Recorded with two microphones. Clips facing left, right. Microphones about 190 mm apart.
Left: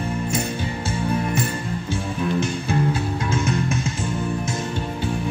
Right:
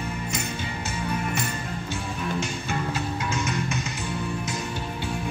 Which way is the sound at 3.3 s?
30° left (ahead or behind).